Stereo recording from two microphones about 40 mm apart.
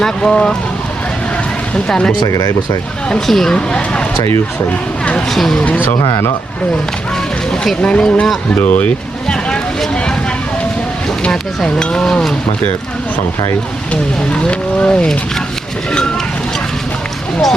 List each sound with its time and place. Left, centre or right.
0.0 s speech: left
3.2 s speech: centre
5.3 s speech: centre
7.8 s speech: left
8.5 s speech: left
11.3 s speech: centre
13.9 s speech: left